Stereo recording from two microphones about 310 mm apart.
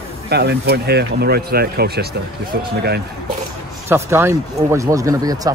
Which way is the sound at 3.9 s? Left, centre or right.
Centre.